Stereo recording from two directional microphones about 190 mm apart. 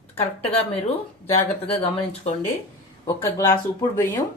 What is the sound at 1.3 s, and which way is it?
Speech, 30° left (ahead or behind).